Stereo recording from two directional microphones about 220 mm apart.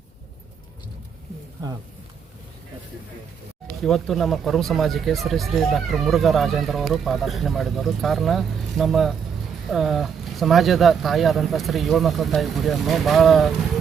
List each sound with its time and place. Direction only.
3.8 s speech: centre (ahead or behind)